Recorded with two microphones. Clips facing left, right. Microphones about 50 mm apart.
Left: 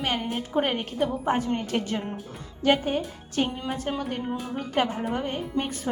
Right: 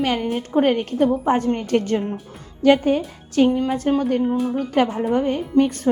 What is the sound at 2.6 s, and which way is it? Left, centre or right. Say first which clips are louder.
Speech: right 7 dB; right.